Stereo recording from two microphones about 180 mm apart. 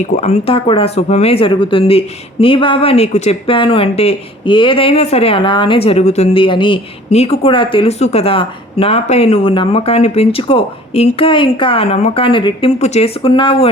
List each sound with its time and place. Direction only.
0.0 s speech: 40° left (ahead or behind)